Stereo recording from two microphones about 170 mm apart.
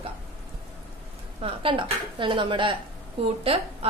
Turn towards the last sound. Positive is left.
turn(degrees=-35)  # may be behind; listen again after turning